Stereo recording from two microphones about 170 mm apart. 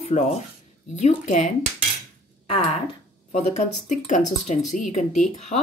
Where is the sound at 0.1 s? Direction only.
45° left (ahead or behind).